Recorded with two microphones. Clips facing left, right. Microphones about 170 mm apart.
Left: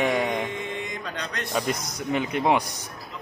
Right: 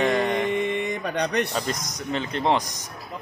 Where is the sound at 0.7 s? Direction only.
65° right (ahead or behind).